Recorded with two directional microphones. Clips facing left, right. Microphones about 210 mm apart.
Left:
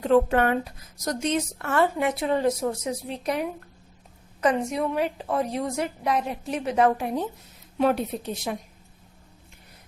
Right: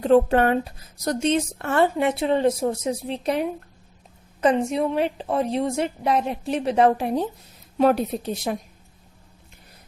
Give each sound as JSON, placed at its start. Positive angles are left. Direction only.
{"t": 0.0, "sound": "a woman's voice", "side_deg": -35}